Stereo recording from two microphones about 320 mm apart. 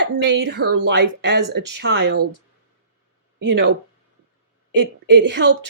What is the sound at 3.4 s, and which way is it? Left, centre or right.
Speech, right.